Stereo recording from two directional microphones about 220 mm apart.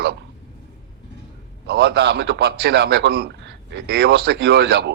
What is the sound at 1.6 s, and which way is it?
A man's voice, 45° right (ahead or behind).